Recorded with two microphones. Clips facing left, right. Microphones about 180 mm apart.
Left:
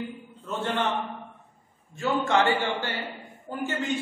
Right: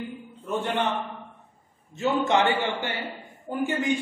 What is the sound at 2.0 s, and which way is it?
A man's voice, 20° right (ahead or behind).